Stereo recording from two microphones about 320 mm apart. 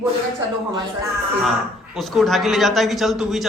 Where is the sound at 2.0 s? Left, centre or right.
Centre.